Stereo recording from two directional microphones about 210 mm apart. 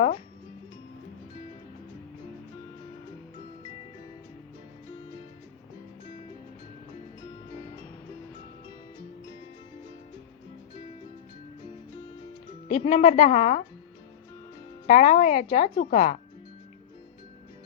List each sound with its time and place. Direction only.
12.6 s speech: 35° left (ahead or behind)
14.8 s speech: 35° left (ahead or behind)